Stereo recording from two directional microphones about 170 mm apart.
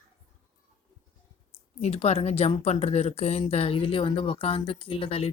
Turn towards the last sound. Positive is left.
turn(degrees=35)  # may be behind; listen again after turning